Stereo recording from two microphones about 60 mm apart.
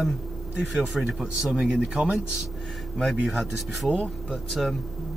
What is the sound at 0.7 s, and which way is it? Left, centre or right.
Speech, centre.